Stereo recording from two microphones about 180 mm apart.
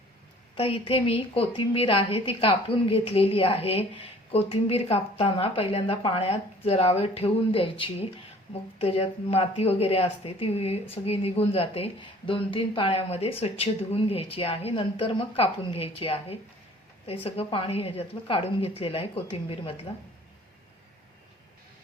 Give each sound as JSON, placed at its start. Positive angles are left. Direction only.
{"t": 0.5, "sound": "a woman's voice", "side_deg": 30}